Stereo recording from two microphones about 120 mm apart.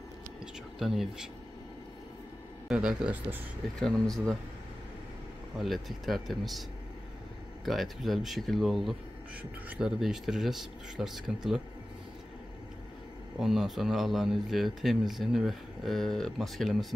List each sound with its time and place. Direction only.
0.7 s speech: centre (ahead or behind)
2.7 s speech: 5° right (ahead or behind)
3.8 s speech: 5° left (ahead or behind)
5.6 s speech: centre (ahead or behind)
7.6 s speech: centre (ahead or behind)
13.4 s speech: 5° right (ahead or behind)